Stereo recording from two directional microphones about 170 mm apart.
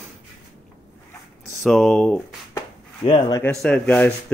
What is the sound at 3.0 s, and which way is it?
Speech, 25° left (ahead or behind).